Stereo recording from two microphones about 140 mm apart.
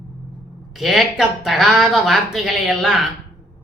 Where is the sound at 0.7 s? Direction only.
Centre (ahead or behind).